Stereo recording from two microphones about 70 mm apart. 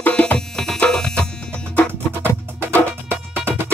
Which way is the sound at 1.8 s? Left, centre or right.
Left.